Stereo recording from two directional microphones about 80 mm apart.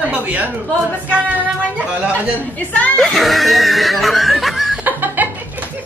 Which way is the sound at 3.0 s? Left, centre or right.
Centre.